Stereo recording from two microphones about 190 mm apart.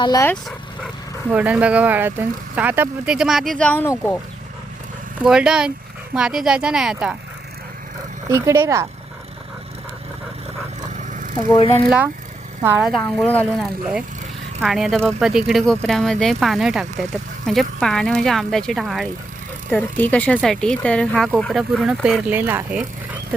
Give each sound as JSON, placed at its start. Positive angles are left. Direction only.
{"t": 0.0, "sound": "speech", "side_deg": 15}
{"t": 1.3, "sound": "speech", "side_deg": -10}
{"t": 5.2, "sound": "speech", "side_deg": -5}
{"t": 8.3, "sound": "speech", "side_deg": -15}
{"t": 10.9, "sound": "a sound", "side_deg": -40}
{"t": 11.3, "sound": "speech", "side_deg": 25}
{"t": 11.9, "sound": "speech", "side_deg": -10}
{"t": 13.1, "sound": "speech", "side_deg": 10}